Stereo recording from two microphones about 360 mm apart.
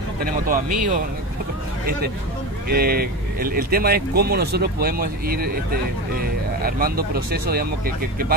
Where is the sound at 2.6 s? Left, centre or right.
Right.